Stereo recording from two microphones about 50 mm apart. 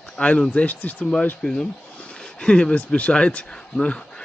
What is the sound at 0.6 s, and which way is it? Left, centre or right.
Speech, left.